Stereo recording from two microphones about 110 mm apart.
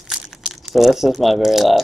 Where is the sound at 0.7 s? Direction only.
Centre (ahead or behind).